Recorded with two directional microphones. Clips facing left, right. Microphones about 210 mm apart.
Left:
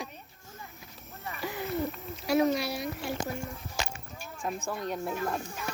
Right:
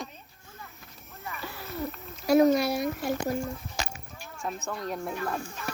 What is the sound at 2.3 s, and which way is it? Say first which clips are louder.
Speech: right 5 dB; 40° right (ahead or behind).